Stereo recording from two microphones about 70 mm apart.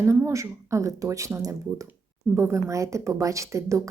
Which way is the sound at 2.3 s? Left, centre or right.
Right.